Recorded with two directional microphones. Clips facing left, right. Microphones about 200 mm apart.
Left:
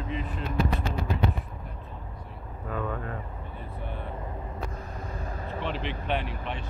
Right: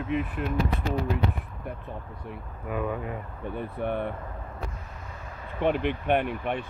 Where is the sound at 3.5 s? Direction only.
65° right (ahead or behind).